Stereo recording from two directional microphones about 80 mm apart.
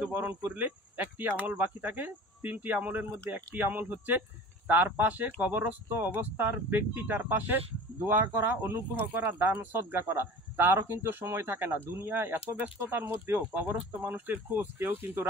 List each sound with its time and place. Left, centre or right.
0.1 s speech: right